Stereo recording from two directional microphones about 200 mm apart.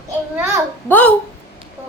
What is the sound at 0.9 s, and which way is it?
Speech, 10° left (ahead or behind).